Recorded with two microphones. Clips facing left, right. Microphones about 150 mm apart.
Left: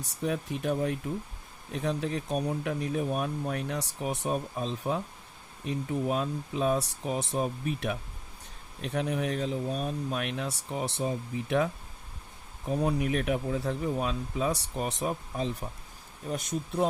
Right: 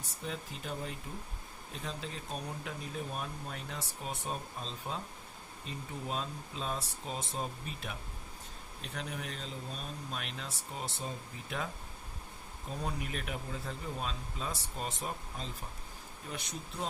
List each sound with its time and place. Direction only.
0.3 s speech: 65° left (ahead or behind)
16.3 s speech: 50° left (ahead or behind)